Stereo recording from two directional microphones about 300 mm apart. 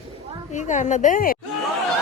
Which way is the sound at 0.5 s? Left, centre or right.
Left.